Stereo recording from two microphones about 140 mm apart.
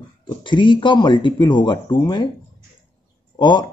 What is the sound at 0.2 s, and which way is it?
Speech, 35° left (ahead or behind).